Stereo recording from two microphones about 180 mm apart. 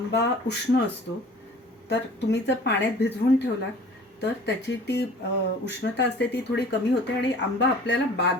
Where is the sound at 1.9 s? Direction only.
70° left (ahead or behind).